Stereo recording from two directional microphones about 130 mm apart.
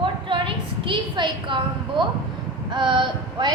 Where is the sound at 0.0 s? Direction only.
40° right (ahead or behind).